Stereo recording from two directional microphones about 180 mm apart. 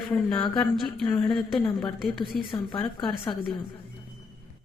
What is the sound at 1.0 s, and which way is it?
Speech, 20° left (ahead or behind).